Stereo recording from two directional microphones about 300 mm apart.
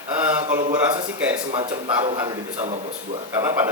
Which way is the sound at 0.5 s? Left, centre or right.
Centre.